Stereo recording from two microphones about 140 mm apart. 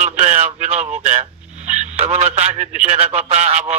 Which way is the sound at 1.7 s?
55° right (ahead or behind).